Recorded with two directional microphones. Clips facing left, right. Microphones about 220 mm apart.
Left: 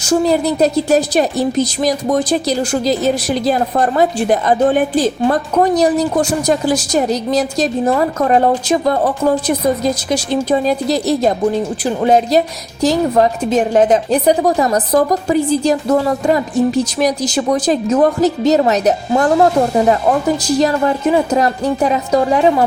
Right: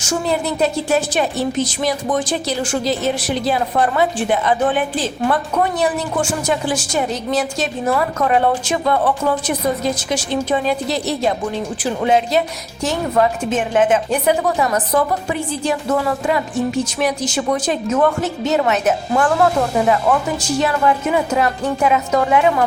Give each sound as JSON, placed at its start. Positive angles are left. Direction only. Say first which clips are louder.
{"t": 0.0, "sound": "a woman's voice", "louder": "left 6 dB", "side_deg": 35}